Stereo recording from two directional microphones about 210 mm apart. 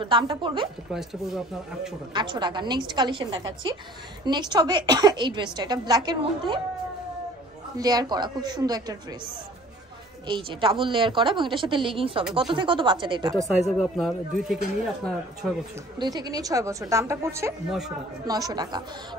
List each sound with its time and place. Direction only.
0.0 s a woman's voice: 25° right (ahead or behind)
0.9 s speech: centre (ahead or behind)
2.1 s a woman's voice: 20° right (ahead or behind)
7.7 s a woman's voice: 20° right (ahead or behind)
10.2 s a woman's voice: 25° right (ahead or behind)
13.4 s speech: centre (ahead or behind)
16.0 s a woman's voice: 20° right (ahead or behind)
17.6 s speech: centre (ahead or behind)
18.2 s a woman's voice: 20° right (ahead or behind)